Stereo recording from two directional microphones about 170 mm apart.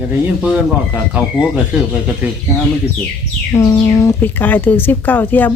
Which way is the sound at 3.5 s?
20° left (ahead or behind).